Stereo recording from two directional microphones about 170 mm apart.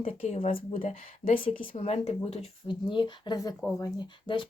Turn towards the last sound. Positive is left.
turn(degrees=25)  # may be behind; listen again after turning